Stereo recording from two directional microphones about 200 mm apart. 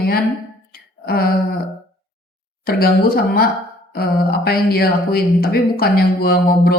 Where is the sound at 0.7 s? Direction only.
50° left (ahead or behind).